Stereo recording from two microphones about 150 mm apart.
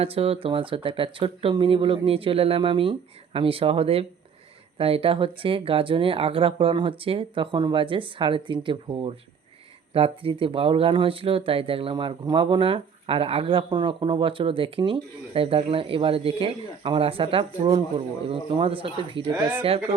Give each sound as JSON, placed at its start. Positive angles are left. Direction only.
{"t": 0.0, "sound": "speech", "side_deg": -40}
{"t": 19.4, "sound": "speech", "side_deg": -10}